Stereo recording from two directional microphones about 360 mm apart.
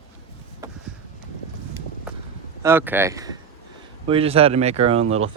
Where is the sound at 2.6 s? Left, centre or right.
Centre.